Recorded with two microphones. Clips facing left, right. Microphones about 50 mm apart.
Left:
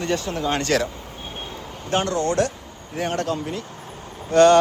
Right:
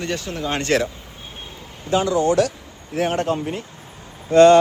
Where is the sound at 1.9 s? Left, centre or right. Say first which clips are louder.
Right 3 dB; left.